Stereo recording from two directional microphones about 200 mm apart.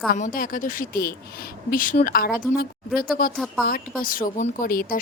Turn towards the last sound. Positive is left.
turn(degrees=45)  # may be behind; listen again after turning